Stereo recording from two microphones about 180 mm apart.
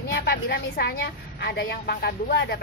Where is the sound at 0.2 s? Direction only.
55° left (ahead or behind).